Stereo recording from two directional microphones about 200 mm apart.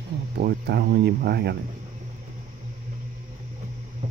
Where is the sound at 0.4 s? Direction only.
50° right (ahead or behind).